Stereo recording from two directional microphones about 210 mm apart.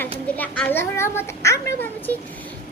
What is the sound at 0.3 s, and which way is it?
A child's voice, 5° left (ahead or behind).